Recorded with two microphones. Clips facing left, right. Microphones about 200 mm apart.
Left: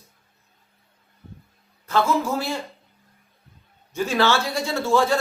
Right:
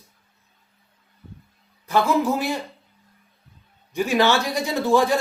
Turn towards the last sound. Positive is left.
turn(degrees=-15)  # may be behind; listen again after turning